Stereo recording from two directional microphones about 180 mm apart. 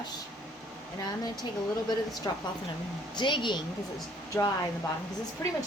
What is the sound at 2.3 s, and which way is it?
A woman's voice, 20° left (ahead or behind).